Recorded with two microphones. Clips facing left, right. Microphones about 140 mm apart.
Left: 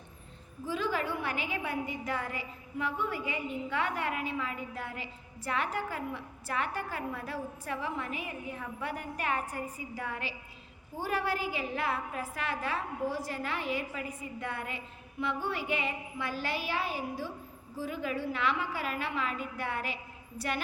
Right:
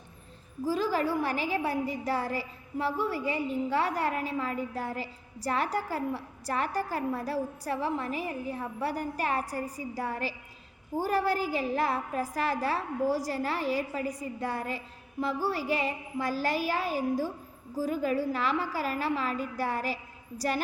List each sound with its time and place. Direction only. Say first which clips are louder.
0.6 s a woman's voice: right 5 dB; 35° right (ahead or behind)